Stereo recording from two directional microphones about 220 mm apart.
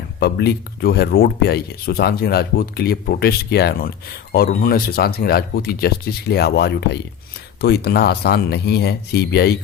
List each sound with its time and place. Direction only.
0.2 s speech: 50° left (ahead or behind)